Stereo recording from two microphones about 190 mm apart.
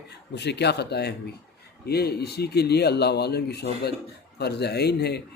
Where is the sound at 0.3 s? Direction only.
60° left (ahead or behind).